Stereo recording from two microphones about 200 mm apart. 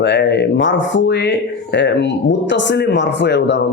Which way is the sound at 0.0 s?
60° left (ahead or behind).